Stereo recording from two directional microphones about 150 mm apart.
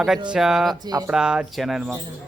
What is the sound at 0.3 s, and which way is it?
Speech, 5° right (ahead or behind).